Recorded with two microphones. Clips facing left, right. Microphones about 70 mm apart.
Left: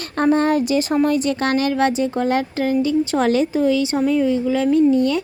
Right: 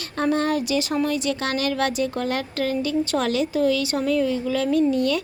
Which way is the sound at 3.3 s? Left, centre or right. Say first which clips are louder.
Left 5 dB; left.